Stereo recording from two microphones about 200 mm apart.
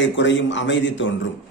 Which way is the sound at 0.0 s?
65° left (ahead or behind).